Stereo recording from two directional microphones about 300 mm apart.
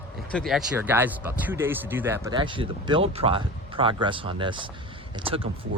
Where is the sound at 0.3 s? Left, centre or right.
Centre.